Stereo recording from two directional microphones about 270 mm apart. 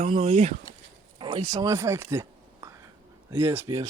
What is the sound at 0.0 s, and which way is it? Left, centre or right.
Speech, right.